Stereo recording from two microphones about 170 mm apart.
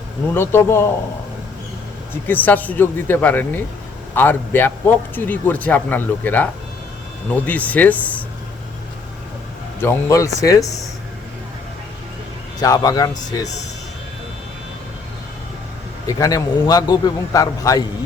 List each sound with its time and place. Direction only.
0.3 s speech: 15° left (ahead or behind)
2.2 s speech: 10° left (ahead or behind)
9.8 s a man's voice: 15° left (ahead or behind)
12.6 s a man's voice: 20° left (ahead or behind)
16.0 s a man's voice: 20° left (ahead or behind)